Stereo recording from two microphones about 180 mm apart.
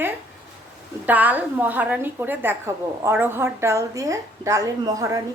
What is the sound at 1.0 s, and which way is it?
A woman's voice, 10° right (ahead or behind).